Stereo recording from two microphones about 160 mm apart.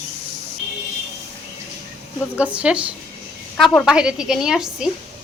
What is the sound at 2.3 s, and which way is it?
Speech, 10° right (ahead or behind).